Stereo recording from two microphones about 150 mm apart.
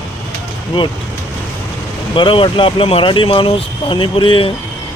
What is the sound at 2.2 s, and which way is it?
Speech, 35° left (ahead or behind).